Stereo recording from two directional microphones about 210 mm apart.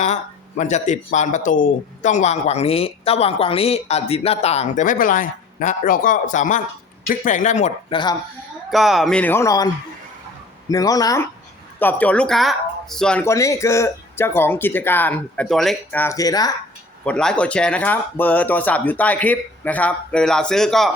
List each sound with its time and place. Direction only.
0.0 s speech: 35° left (ahead or behind)
8.7 s speech: centre (ahead or behind); by 9.6 s 15° left (ahead or behind)
10.7 s speech: 15° left (ahead or behind)
17.1 s speech: 5° left (ahead or behind)